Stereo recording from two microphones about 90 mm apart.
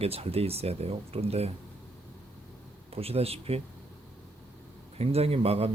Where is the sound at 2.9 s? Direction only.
90° right.